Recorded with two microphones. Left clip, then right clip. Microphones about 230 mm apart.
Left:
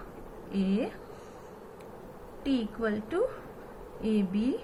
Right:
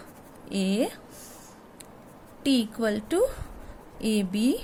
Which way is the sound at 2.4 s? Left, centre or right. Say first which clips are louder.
Right 5 dB; right.